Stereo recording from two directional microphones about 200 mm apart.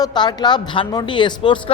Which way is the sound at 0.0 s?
20° left (ahead or behind).